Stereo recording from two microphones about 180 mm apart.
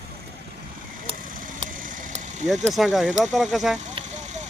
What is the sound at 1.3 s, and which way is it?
Vehicle, 50° right (ahead or behind).